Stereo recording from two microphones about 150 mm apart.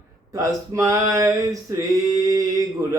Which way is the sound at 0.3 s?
20° right (ahead or behind).